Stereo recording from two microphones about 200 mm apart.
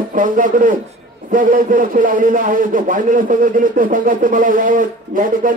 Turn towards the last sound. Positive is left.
turn(degrees=-40)  # may be behind; listen again after turning